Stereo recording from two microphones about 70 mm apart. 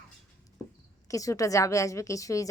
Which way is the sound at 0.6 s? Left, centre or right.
Right.